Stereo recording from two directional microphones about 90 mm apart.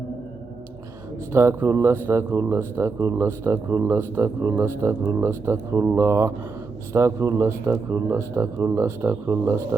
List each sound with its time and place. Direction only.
1.3 s speech: 30° right (ahead or behind)